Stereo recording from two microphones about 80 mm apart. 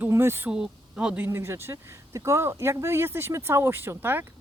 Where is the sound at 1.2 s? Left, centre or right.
Right.